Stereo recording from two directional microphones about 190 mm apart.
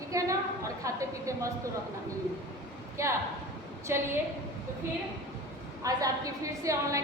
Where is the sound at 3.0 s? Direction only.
15° right (ahead or behind).